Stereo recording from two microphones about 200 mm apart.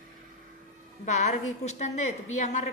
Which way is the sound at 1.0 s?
35° left (ahead or behind).